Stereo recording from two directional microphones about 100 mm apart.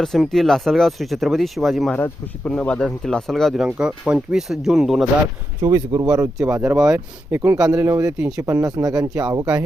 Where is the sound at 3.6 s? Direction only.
10° right (ahead or behind).